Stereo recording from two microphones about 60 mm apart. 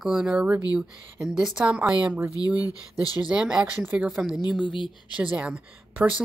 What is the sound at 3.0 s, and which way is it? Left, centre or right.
Speech, left.